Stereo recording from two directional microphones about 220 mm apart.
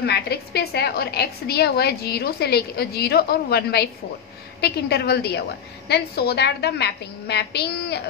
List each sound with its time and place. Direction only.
0.0 s a woman's voice: 50° left (ahead or behind)